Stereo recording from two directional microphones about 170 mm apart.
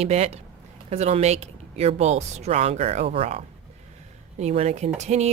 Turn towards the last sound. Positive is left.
turn(degrees=-40)  # may be behind; listen again after turning